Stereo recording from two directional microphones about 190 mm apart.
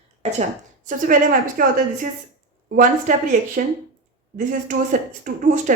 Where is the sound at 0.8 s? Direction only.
45° right (ahead or behind).